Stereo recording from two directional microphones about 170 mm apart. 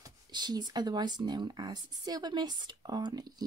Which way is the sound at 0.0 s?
25° right (ahead or behind).